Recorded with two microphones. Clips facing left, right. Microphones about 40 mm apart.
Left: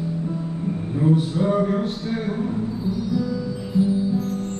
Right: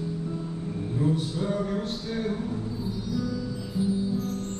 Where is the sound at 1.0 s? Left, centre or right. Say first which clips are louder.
Left 8 dB; left.